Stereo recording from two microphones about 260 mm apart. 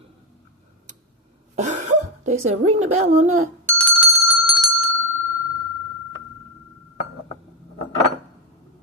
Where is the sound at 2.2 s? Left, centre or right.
Right.